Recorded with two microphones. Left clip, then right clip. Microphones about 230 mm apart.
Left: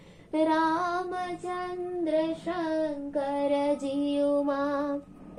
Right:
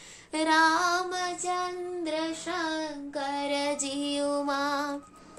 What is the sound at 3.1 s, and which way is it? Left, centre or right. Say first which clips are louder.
Child singing: left 2 dB; right.